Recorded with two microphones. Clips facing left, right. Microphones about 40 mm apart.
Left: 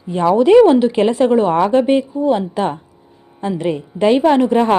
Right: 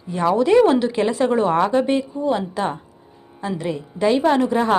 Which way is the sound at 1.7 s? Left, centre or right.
Left.